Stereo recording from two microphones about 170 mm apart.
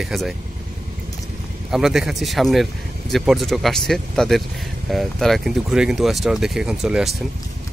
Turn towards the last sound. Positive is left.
turn(degrees=-5)  # may be behind; listen again after turning